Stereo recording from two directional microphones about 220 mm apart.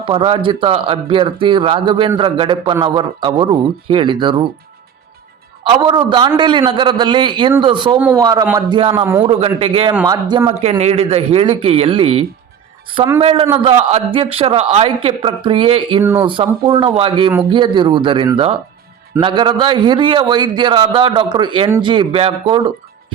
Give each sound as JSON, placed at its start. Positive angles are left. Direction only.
{"t": 0.0, "sound": "speech", "side_deg": -25}
{"t": 5.6, "sound": "a man's voice", "side_deg": -20}
{"t": 9.2, "sound": "speech", "side_deg": -25}
{"t": 10.6, "sound": "speech", "side_deg": -30}